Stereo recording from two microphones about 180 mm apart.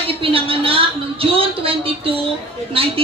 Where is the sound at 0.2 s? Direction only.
30° right (ahead or behind).